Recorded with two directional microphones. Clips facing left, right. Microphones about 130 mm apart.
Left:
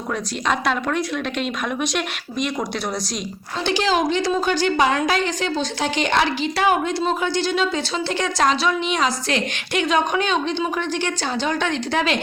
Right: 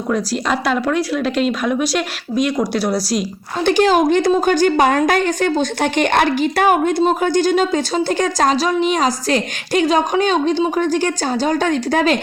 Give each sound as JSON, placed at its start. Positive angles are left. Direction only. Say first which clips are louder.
{"t": 0.1, "sound": "speech", "louder": "right 4 dB", "side_deg": -5}
{"t": 3.6, "sound": "a woman's voice", "louder": "right 7 dB", "side_deg": -50}